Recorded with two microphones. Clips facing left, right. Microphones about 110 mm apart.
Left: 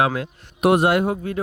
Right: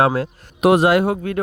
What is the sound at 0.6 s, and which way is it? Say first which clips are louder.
Speech: right 3 dB; 90° right.